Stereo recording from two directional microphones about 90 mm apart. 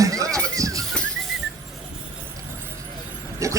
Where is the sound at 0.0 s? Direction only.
40° right (ahead or behind).